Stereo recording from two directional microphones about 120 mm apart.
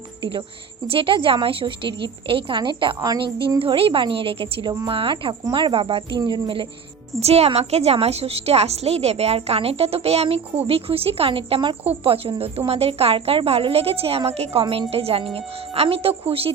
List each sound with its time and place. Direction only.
0.2 s a woman's voice: 45° right (ahead or behind)
3.6 s a woman's voice: 50° right (ahead or behind)
6.1 s a woman's voice: 35° right (ahead or behind)
7.2 s a woman's voice: 60° right (ahead or behind)